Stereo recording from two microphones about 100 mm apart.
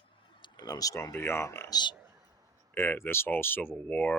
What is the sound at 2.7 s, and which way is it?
Speech, 25° left (ahead or behind).